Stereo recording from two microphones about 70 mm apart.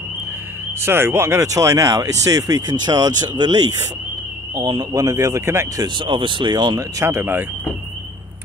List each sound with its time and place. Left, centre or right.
0.7 s speech: right
5.4 s speech: right
6.4 s speech: right
6.8 s speech: right